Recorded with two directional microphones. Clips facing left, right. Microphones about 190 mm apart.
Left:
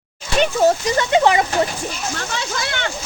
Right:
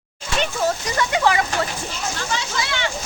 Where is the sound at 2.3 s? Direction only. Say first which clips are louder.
Left 1 dB; 55° left (ahead or behind).